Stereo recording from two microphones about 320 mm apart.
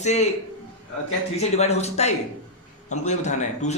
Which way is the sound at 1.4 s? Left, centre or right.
Centre.